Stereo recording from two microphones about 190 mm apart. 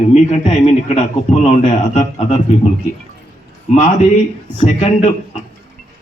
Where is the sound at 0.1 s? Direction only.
35° left (ahead or behind).